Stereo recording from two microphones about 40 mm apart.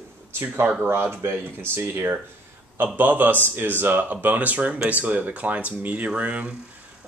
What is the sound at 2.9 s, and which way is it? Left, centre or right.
Speech, right.